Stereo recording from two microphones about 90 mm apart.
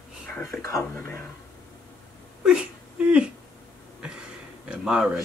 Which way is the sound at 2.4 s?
10° right (ahead or behind).